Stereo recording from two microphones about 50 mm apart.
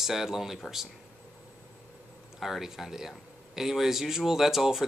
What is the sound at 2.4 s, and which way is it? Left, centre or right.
Speech, centre.